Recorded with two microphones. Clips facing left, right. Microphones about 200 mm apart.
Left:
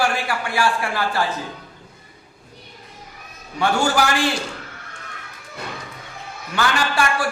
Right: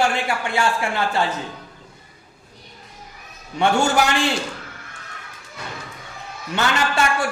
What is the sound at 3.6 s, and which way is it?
Speech, 25° right (ahead or behind).